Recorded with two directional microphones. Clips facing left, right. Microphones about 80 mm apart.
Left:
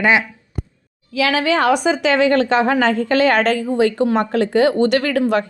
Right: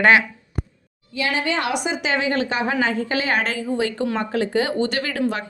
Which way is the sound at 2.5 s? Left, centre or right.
Left.